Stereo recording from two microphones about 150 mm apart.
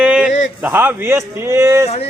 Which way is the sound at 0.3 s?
55° left (ahead or behind).